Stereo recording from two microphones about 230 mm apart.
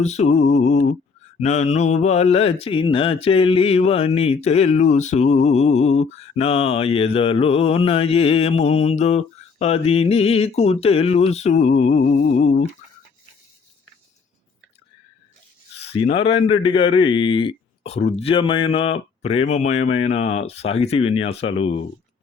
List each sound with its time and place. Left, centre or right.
0.0 s speech: left
15.8 s speech: left